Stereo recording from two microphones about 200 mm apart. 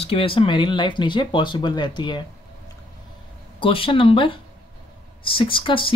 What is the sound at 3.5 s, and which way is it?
Speech, 25° left (ahead or behind).